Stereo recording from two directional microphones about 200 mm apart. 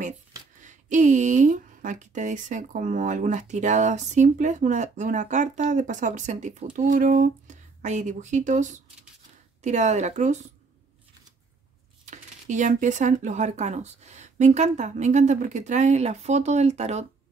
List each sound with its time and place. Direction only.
0.6 s speech: 40° right (ahead or behind)
12.1 s speech: 35° right (ahead or behind)